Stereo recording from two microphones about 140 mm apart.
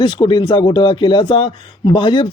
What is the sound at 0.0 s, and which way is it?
Speech, 35° left (ahead or behind).